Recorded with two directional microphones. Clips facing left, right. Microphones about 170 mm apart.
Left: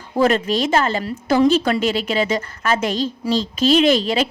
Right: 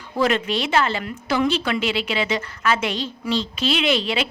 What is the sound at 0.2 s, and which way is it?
A woman's voice, 40° left (ahead or behind).